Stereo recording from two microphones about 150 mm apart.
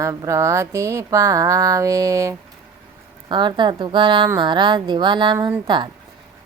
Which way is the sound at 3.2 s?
30° right (ahead or behind).